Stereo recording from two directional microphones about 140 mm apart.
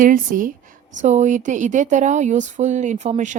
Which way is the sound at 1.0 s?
55° right (ahead or behind).